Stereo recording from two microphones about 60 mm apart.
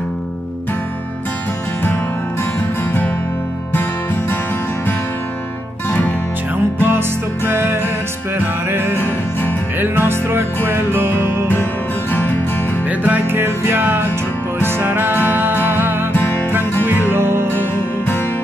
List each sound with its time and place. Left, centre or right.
3.7 s music: left
5.9 s music: left
6.8 s music: right
9.0 s music: left
9.8 s music: right
13.0 s music: right
13.4 s music: right
17.1 s music: right
17.5 s music: left